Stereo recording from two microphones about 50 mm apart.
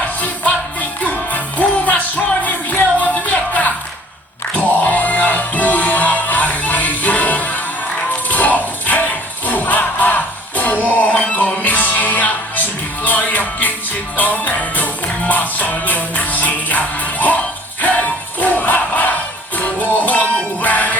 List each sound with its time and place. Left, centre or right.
0.2 s music: left
11.1 s music: left